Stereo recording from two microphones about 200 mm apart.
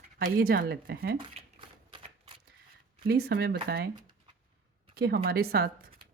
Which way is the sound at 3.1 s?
55° right (ahead or behind).